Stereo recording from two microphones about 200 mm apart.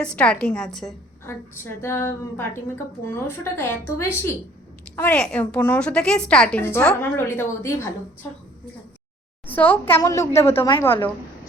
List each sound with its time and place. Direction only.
0.0 s a woman's voice: 5° left (ahead or behind)
1.3 s a woman's voice: 15° left (ahead or behind)
9.6 s a woman's voice: 10° left (ahead or behind)